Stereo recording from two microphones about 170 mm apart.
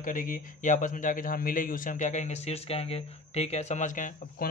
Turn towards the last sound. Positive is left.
turn(degrees=50)  # may be behind; listen again after turning